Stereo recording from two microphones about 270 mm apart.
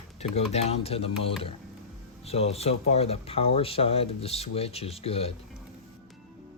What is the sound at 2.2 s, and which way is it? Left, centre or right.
Speech, left.